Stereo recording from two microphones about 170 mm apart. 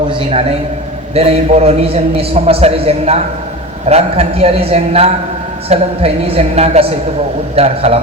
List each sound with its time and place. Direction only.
0.1 s a man's voice: 35° right (ahead or behind)